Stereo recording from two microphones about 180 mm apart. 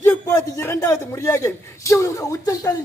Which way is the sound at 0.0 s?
10° left (ahead or behind).